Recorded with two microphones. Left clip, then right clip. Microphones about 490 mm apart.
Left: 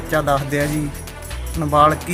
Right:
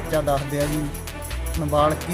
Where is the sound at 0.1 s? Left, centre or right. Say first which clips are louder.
Left 4 dB; right.